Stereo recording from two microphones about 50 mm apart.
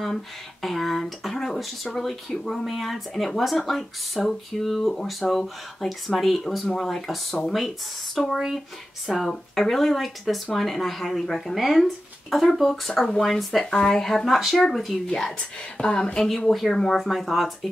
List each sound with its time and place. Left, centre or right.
0.0 s speech: centre
13.6 s speech: centre
15.0 s speech: centre
17.1 s speech: centre